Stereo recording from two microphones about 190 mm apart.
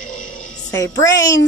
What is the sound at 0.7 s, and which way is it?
Speech, 15° left (ahead or behind).